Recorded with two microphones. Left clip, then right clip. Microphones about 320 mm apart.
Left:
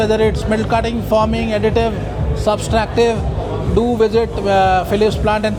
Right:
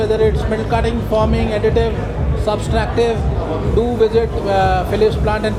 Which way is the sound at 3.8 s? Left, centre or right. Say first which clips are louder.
Left 1 dB; left.